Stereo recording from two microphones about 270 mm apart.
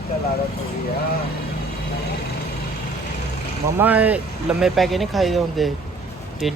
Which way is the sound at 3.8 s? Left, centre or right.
Centre.